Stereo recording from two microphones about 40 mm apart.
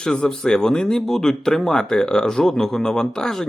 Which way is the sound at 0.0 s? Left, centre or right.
Centre.